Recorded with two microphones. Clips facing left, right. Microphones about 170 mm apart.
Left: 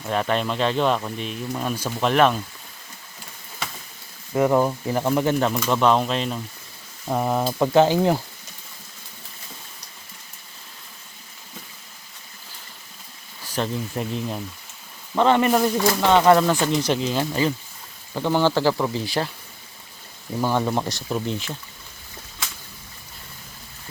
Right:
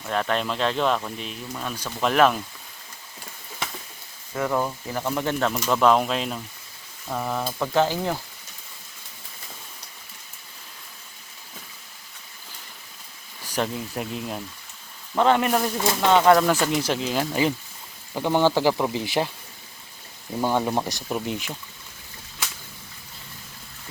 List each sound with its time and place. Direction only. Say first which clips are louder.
0.0 s speech: left 2 dB; 5° left (ahead or behind)
4.4 s speech: left 6 dB; 20° left (ahead or behind)
5.1 s speech: left 3 dB; 10° left (ahead or behind)
5.6 s speech: right 2 dB; centre (ahead or behind)
7.1 s speech: left 5 dB; 25° left (ahead or behind)
13.6 s speech: left 1 dB; 5° right (ahead or behind)
20.4 s speech: left 1 dB; 15° right (ahead or behind)